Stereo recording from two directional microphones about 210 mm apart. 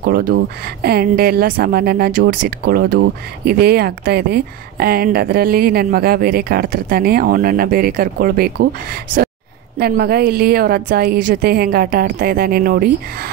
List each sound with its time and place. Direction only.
0.0 s speech: 45° right (ahead or behind)
9.8 s speech: 45° right (ahead or behind)